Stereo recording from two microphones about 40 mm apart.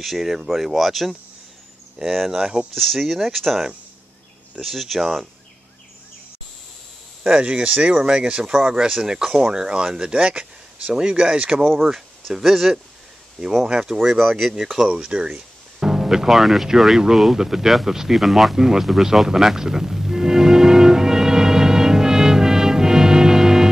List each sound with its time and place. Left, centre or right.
0.0 s speech: centre
2.3 s speech: centre
2.7 s speech: centre
7.5 s speech: right
8.0 s speech: right
9.0 s speech: centre; by 11.6 s right
11.6 s speech: centre
12.4 s speech: centre
13.7 s speech: right
13.9 s speech: centre
14.5 s speech: centre
15.3 s music: centre
16.6 s a sound: centre